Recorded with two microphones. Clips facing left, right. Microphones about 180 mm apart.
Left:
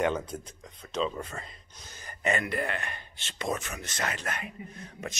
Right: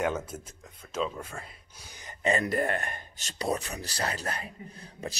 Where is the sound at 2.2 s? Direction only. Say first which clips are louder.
Right 3 dB; 35° right (ahead or behind).